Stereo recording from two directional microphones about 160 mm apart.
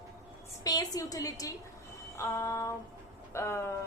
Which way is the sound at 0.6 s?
25° left (ahead or behind).